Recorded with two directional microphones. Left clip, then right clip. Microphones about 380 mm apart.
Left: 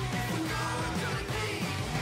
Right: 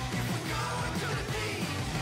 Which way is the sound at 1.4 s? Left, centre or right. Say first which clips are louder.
Left 1 dB; centre.